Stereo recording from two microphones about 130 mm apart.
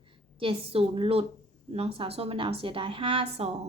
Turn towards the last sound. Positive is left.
turn(degrees=-45)  # may be behind; listen again after turning